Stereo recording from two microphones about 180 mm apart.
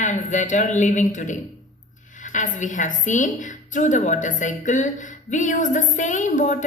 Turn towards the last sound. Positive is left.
turn(degrees=45)  # may be behind; listen again after turning